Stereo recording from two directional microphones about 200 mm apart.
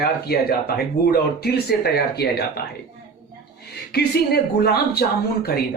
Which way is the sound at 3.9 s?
50° left (ahead or behind).